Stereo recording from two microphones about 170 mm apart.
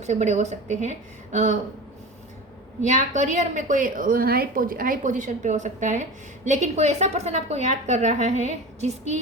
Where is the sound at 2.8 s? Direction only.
45° right (ahead or behind).